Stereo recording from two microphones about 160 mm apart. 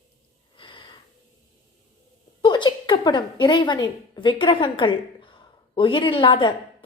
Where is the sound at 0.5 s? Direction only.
30° left (ahead or behind).